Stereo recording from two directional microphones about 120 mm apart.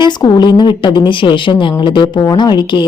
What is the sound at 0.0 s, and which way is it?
A woman's voice, 35° left (ahead or behind).